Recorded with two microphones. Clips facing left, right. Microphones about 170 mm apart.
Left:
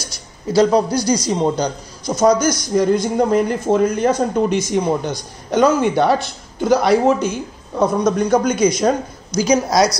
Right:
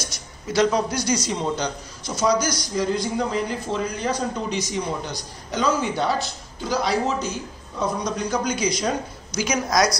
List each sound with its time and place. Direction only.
0.5 s a man's voice: 35° left (ahead or behind); by 8.9 s 50° left (ahead or behind)
9.4 s a man's voice: 30° left (ahead or behind)